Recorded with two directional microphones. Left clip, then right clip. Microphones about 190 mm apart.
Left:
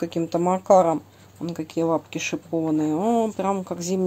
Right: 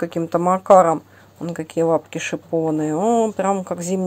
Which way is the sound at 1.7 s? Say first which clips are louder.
Right 5 dB; 15° right (ahead or behind).